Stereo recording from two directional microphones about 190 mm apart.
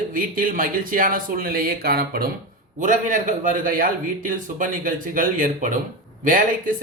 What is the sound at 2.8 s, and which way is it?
Speech, 40° right (ahead or behind).